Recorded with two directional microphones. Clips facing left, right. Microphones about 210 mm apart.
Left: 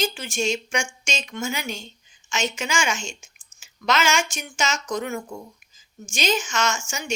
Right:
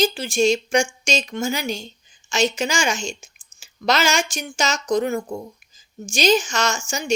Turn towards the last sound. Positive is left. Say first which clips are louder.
# right 2 dB
turn(degrees=-35)  # may be behind; listen again after turning